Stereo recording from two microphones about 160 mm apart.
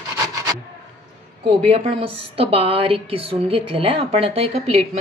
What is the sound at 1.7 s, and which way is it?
A woman's voice, 35° right (ahead or behind).